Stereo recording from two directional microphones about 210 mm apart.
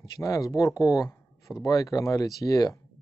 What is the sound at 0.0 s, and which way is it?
Speech, 15° left (ahead or behind).